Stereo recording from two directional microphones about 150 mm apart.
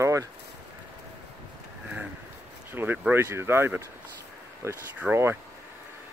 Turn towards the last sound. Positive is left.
turn(degrees=-15)  # may be behind; listen again after turning